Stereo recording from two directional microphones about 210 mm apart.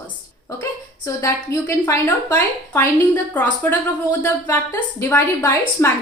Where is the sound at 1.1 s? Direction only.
15° left (ahead or behind).